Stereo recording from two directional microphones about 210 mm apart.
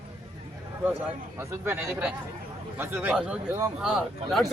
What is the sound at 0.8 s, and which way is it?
Speech, 10° right (ahead or behind).